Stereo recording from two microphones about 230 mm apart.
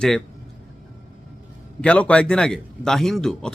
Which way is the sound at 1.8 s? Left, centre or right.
Centre.